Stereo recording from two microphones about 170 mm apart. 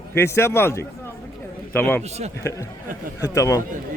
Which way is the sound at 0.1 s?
15° left (ahead or behind).